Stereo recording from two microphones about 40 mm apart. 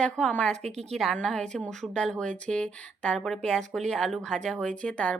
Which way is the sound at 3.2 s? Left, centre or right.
Centre.